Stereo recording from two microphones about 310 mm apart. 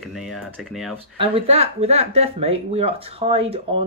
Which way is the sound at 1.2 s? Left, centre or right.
Centre.